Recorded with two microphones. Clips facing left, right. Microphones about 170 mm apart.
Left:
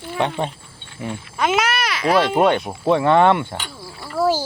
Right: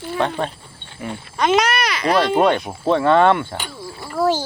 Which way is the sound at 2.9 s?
15° left (ahead or behind).